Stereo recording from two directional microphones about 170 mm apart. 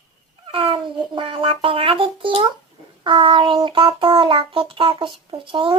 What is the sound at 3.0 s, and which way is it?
Child singing, 30° right (ahead or behind).